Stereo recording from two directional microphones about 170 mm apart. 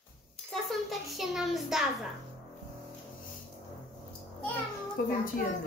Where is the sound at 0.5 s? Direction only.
Centre (ahead or behind).